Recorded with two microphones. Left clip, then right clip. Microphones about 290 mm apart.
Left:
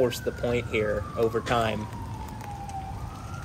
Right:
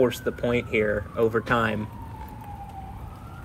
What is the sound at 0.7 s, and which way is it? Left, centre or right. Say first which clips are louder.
Speech: right 3 dB; centre.